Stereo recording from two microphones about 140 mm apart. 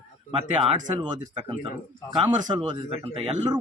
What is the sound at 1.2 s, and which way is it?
A man's voice, 30° right (ahead or behind).